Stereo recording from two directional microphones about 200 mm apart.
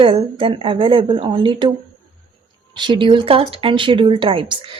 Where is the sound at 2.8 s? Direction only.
25° right (ahead or behind).